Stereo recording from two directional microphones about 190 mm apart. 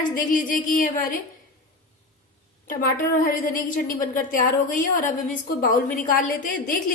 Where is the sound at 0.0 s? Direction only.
45° left (ahead or behind).